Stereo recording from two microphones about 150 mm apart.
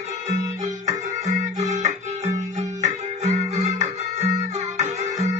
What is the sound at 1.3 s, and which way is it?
Music, 55° right (ahead or behind).